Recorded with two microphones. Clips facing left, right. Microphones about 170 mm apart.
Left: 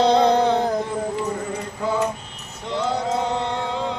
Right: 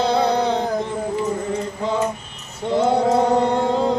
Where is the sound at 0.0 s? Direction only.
10° right (ahead or behind).